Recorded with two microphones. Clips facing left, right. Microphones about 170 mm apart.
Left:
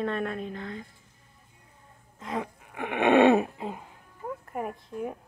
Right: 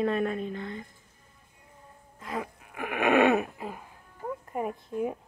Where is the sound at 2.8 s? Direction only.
25° left (ahead or behind).